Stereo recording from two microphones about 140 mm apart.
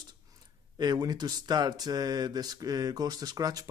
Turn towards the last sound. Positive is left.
turn(degrees=-25)  # may be behind; listen again after turning